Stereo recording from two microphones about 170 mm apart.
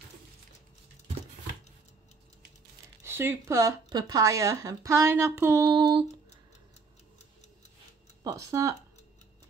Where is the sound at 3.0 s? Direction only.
15° right (ahead or behind).